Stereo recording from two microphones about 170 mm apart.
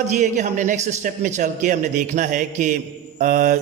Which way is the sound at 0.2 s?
45° right (ahead or behind).